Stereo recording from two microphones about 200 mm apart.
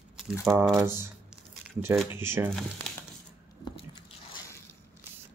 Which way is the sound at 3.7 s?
25° left (ahead or behind).